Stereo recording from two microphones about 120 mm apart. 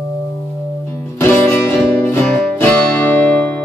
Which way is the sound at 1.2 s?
20° left (ahead or behind).